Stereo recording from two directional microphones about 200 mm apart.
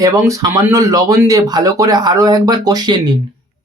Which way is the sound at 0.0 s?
15° right (ahead or behind).